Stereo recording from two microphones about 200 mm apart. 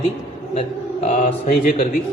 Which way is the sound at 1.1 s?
35° left (ahead or behind).